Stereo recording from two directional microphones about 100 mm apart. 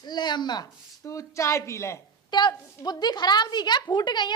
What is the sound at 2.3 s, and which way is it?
A woman's voice, 50° left (ahead or behind).